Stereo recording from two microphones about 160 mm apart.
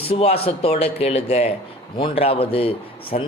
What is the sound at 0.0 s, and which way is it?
Speech, 35° left (ahead or behind).